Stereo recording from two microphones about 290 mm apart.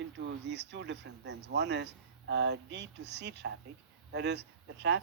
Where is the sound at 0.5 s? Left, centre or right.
Right.